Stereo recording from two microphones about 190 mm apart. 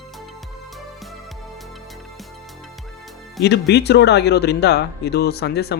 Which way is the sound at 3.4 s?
60° left (ahead or behind).